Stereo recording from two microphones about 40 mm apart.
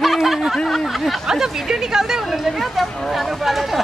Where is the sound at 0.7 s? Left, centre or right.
Centre.